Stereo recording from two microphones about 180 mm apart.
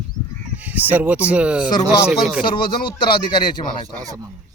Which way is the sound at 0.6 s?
10° right (ahead or behind).